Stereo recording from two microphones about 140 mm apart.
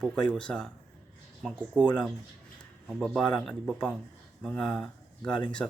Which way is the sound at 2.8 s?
Centre (ahead or behind).